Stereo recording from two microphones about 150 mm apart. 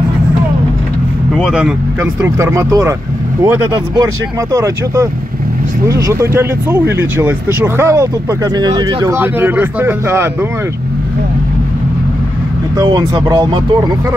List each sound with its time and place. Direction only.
1.3 s speech: 5° right (ahead or behind)
2.2 s speech: 20° right (ahead or behind)
12.7 s speech: 25° right (ahead or behind)